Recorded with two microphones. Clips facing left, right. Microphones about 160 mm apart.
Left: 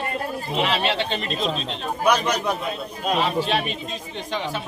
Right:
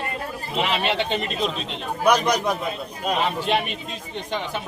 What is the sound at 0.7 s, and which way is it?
Speech, 10° right (ahead or behind).